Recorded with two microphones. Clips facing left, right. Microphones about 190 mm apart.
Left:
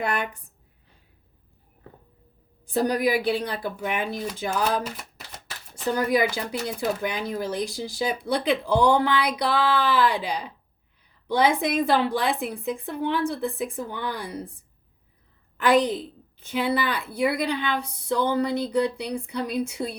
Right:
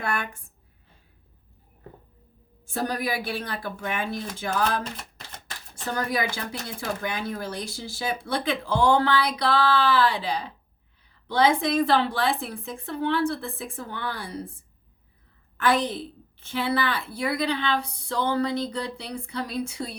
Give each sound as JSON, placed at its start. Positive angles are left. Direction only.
{"t": 0.0, "sound": "a woman's voice", "side_deg": 20}
{"t": 2.7, "sound": "speech", "side_deg": 15}
{"t": 16.5, "sound": "speech", "side_deg": 15}